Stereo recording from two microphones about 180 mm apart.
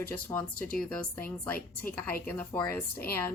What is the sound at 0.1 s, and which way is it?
A woman's voice, 10° left (ahead or behind).